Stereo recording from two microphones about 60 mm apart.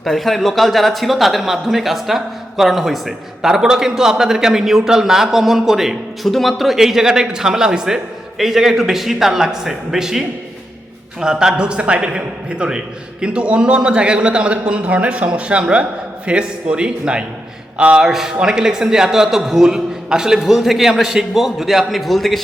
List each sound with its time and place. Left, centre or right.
0.0 s a man's voice: centre; by 18.0 s right
18.0 s a man's voice: centre